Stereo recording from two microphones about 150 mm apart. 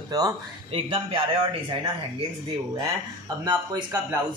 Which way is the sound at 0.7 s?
35° right (ahead or behind).